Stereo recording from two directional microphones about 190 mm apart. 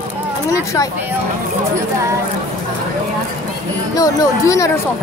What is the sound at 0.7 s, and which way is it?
Speech, 15° left (ahead or behind).